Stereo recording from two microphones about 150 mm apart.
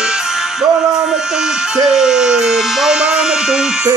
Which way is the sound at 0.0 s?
5° right (ahead or behind).